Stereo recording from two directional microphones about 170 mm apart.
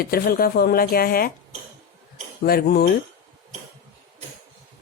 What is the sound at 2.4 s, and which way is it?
Speech, 65° left (ahead or behind).